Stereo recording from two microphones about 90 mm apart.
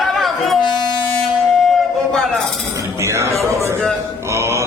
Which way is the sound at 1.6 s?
5° left (ahead or behind).